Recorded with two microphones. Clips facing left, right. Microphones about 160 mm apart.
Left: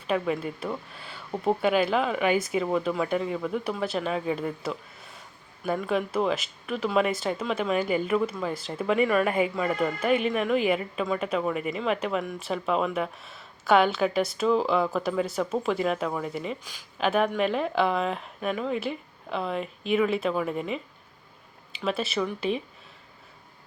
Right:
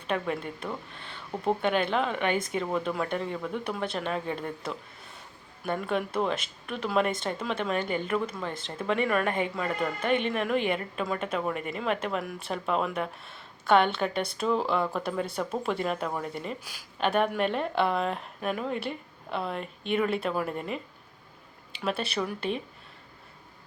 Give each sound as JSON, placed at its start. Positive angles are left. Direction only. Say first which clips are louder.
{"t": 0.1, "sound": "speech", "louder": "left 3 dB", "side_deg": 5}
{"t": 21.8, "sound": "speech", "louder": "left 2 dB", "side_deg": 0}